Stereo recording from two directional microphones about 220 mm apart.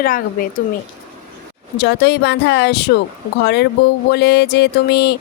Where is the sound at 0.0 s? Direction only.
40° left (ahead or behind).